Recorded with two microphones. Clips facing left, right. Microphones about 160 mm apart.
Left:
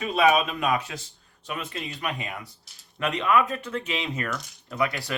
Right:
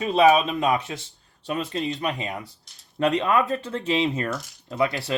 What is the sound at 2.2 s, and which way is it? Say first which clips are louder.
Speech: right 5 dB; 20° right (ahead or behind).